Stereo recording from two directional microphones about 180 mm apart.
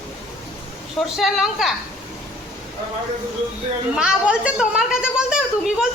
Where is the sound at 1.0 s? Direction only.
Centre (ahead or behind).